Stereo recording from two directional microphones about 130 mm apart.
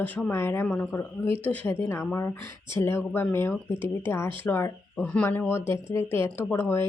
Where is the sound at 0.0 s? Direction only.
15° left (ahead or behind).